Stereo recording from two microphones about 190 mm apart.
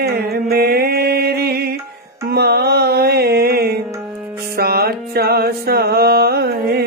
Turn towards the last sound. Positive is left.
turn(degrees=-55)  # may be behind; listen again after turning